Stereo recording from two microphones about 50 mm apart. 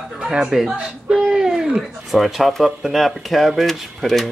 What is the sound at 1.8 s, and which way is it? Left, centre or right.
Speech, centre.